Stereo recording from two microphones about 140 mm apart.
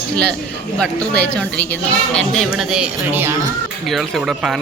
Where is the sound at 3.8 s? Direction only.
Centre (ahead or behind).